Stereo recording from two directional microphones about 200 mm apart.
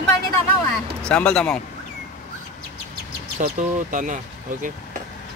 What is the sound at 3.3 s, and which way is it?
Speech, 40° right (ahead or behind).